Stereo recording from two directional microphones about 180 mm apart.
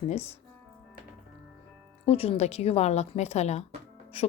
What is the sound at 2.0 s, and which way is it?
Speech, 35° left (ahead or behind).